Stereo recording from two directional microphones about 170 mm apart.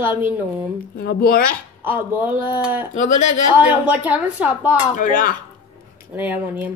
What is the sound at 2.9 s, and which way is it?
Speech, 45° left (ahead or behind).